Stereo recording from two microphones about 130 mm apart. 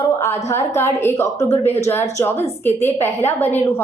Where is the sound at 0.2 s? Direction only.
20° left (ahead or behind).